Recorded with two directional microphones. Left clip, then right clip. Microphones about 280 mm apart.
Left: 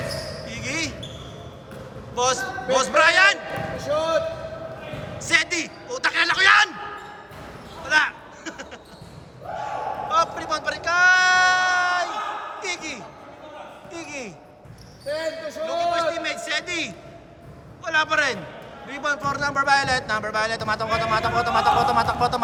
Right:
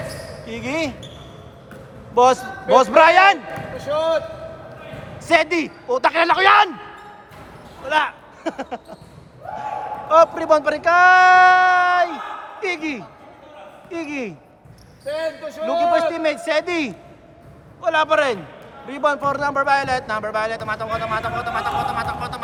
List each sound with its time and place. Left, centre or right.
0.4 s a sound: centre
2.1 s a man's voice: right
5.2 s a man's voice: centre
7.9 s speech: centre
9.6 s a sound: right
12.5 s a man's voice: right
15.6 s a man's voice: right; by 22.4 s centre